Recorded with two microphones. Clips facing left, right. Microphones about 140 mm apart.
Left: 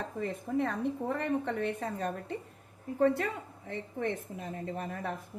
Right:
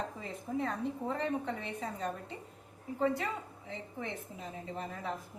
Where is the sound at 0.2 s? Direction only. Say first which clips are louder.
Left 9 dB; 60° left (ahead or behind).